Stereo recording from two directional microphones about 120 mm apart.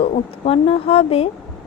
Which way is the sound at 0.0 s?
60° left (ahead or behind).